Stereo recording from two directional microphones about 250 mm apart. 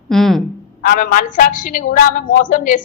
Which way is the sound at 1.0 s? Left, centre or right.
Left.